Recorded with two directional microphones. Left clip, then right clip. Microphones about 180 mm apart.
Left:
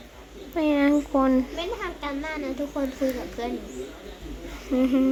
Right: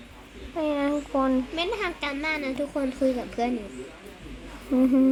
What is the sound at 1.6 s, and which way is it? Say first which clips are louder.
A woman's voice: right 3 dB; 60° right (ahead or behind).